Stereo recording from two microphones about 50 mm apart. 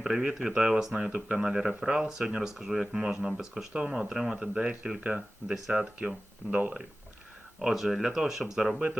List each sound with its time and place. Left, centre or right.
0.0 s speech: centre
1.1 s speech: right
1.5 s speech: centre; by 6.7 s right
7.6 s speech: centre